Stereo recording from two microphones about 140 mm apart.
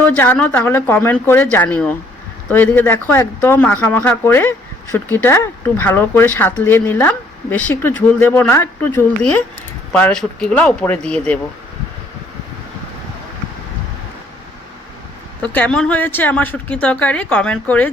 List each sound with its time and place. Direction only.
0.2 s speech: 15° left (ahead or behind)
15.4 s speech: 10° left (ahead or behind)